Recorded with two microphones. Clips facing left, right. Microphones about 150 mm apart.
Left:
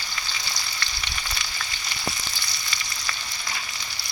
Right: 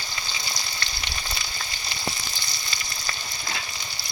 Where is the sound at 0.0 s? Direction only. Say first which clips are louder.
Even; 25° right (ahead or behind).